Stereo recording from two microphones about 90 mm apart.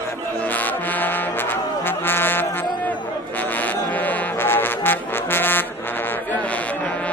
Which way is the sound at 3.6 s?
20° left (ahead or behind).